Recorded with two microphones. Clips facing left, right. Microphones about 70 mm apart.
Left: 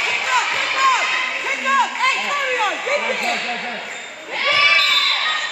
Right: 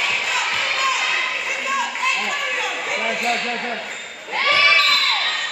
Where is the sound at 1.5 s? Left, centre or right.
Left.